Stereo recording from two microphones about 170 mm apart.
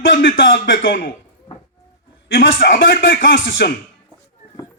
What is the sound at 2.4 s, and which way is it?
A man's voice, 60° left (ahead or behind).